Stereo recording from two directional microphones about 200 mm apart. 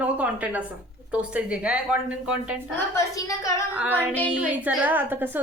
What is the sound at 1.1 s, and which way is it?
A woman's voice, 5° right (ahead or behind).